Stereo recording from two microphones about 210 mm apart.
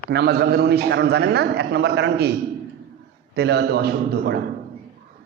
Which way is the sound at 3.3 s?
55° right (ahead or behind).